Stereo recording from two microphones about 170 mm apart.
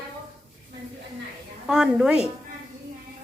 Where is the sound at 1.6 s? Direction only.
5° right (ahead or behind).